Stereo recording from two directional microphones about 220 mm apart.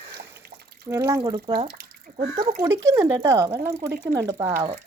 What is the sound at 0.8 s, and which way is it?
Speech, 10° right (ahead or behind).